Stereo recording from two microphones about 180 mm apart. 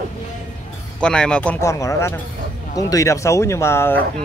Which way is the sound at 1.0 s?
5° left (ahead or behind).